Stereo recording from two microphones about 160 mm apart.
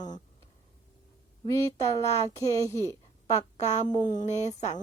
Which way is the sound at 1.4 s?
20° left (ahead or behind).